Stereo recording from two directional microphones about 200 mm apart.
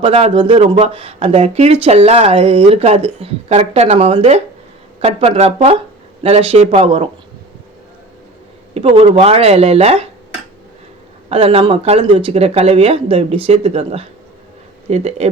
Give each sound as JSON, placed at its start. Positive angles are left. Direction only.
{"t": 0.0, "sound": "speech", "side_deg": -25}
{"t": 8.7, "sound": "speech", "side_deg": -30}
{"t": 11.3, "sound": "speech", "side_deg": -30}